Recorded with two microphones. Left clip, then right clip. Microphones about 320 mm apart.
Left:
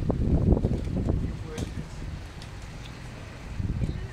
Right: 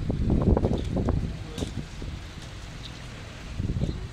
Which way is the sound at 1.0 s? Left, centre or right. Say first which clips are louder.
Right 2 dB; right.